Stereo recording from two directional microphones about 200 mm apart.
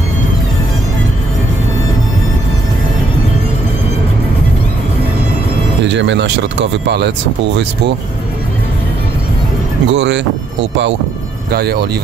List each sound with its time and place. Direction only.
5.9 s speech: 65° right (ahead or behind)
9.9 s speech: 60° right (ahead or behind)
11.5 s speech: 55° right (ahead or behind)